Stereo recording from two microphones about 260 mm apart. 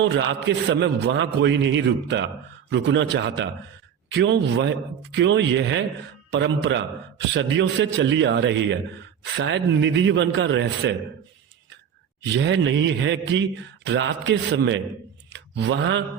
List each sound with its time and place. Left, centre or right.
0.0 s a man's voice: right
12.2 s a man's voice: right
15.3 s mantra: right